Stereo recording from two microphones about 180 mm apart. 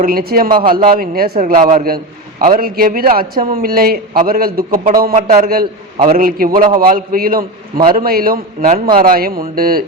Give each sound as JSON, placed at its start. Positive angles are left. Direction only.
{"t": 0.0, "sound": "speech", "side_deg": -55}
{"t": 8.6, "sound": "a man's voice", "side_deg": -35}
{"t": 9.0, "sound": "speech", "side_deg": -55}